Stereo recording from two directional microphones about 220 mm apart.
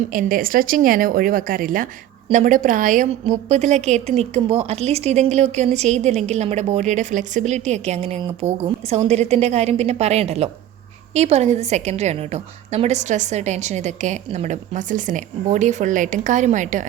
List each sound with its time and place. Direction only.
0.1 s a woman's voice: 40° right (ahead or behind)